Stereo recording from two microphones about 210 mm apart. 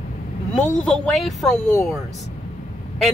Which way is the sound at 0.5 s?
35° left (ahead or behind).